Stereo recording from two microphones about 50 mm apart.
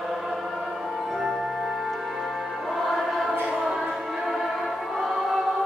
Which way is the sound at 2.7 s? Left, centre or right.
Centre.